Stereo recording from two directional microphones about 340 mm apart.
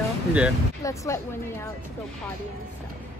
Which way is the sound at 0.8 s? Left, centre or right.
Centre.